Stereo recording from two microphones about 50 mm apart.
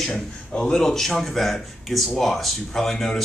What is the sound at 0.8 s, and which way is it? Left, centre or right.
Speech, centre.